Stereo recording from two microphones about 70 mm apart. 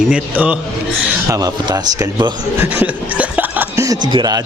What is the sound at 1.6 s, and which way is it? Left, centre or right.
Speech, right.